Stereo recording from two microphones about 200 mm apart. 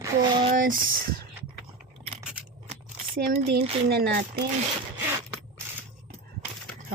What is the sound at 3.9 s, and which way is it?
Speech, 55° right (ahead or behind).